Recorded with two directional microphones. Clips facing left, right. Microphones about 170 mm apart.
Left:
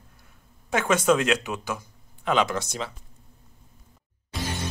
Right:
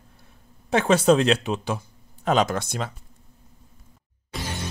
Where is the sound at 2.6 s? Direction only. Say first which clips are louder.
Right 2 dB; 55° right (ahead or behind).